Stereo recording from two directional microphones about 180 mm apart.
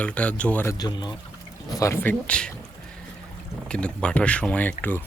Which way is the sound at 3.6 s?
5° left (ahead or behind).